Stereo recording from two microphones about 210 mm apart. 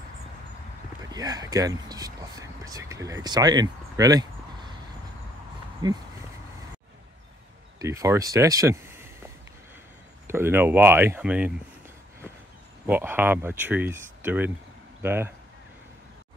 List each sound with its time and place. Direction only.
1.1 s speech: 20° right (ahead or behind)
5.8 s speech: 20° right (ahead or behind)
7.8 s speech: 15° right (ahead or behind)
12.8 s speech: 10° right (ahead or behind)